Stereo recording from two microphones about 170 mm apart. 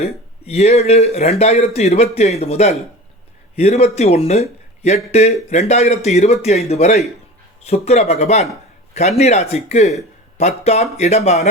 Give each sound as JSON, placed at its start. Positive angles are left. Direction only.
{"t": 0.0, "sound": "speech", "side_deg": 40}